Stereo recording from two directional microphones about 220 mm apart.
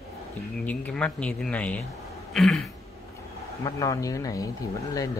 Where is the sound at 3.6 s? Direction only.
15° left (ahead or behind).